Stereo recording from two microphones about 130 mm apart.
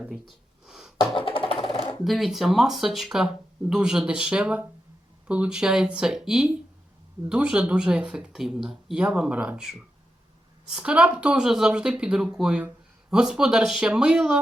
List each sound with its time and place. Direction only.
0.1 s gasp: 5° right (ahead or behind)
1.1 s music: 40° left (ahead or behind)
2.0 s speech: centre (ahead or behind)